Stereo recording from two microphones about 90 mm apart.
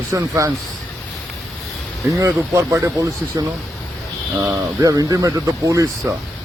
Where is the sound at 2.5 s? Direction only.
35° right (ahead or behind).